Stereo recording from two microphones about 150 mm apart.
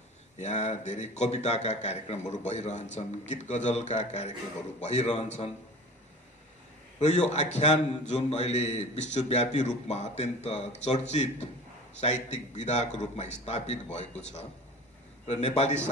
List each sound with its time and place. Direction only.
0.4 s a man's voice: 50° left (ahead or behind)
7.0 s a man's voice: 50° left (ahead or behind)
15.2 s a man's voice: 45° left (ahead or behind)